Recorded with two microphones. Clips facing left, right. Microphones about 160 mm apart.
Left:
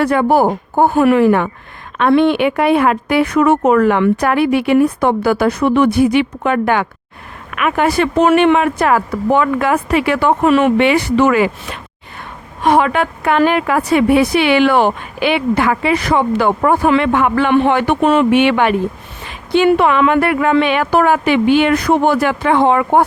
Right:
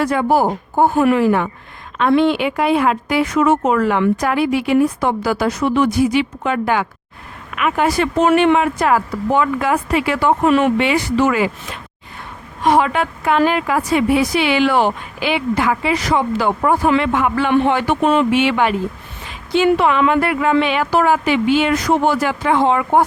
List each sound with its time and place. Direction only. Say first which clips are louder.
0.0 s speech: left 3 dB; 60° left (ahead or behind)